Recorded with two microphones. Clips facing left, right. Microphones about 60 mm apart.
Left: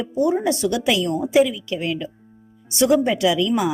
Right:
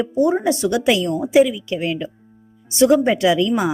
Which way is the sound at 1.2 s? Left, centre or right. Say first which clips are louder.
Right 3 dB; centre.